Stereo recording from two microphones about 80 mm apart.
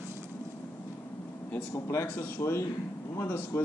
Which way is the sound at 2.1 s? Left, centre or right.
Left.